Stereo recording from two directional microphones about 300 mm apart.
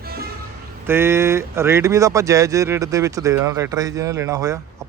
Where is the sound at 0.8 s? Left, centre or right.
Centre.